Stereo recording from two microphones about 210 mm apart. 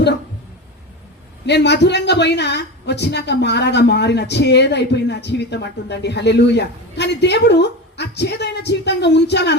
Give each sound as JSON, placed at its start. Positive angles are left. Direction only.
{"t": 1.5, "sound": "a woman's voice", "side_deg": 55}